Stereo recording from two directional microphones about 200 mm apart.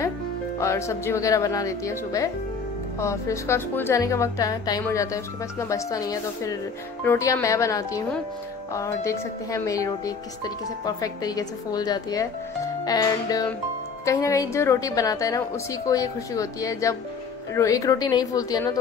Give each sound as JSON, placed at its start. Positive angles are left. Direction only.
{"t": 0.6, "sound": "a woman's voice", "side_deg": 15}